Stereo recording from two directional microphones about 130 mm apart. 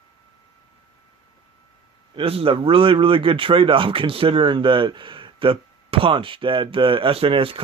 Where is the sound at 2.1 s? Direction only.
45° right (ahead or behind).